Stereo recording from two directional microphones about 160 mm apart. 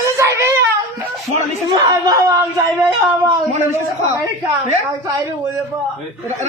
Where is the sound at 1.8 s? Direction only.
20° right (ahead or behind).